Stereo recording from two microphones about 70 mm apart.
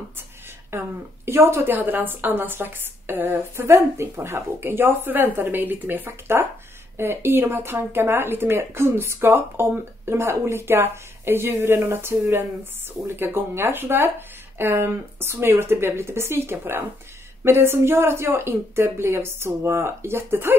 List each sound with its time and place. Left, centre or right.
0.7 s a woman's voice: right